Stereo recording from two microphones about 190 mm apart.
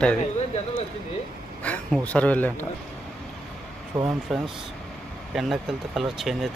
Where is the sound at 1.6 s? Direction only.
5° left (ahead or behind).